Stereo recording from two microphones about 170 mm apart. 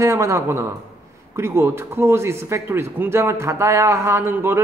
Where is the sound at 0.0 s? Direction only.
15° right (ahead or behind).